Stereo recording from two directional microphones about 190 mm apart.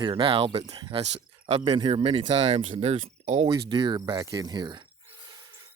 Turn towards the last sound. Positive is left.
turn(degrees=-25)  # may be behind; listen again after turning